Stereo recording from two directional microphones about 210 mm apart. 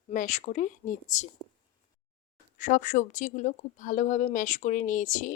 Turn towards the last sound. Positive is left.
turn(degrees=35)  # may be behind; listen again after turning